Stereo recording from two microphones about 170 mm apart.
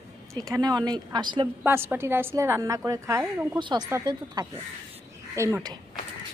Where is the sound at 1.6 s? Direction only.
15° right (ahead or behind).